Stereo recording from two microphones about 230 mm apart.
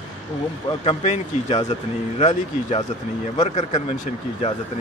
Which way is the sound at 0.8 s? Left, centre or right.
Left.